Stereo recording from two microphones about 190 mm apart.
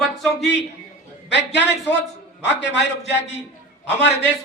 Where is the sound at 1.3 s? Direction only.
65° left (ahead or behind).